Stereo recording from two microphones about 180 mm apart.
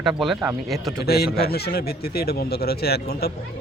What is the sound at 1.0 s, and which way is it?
Speech, 60° left (ahead or behind).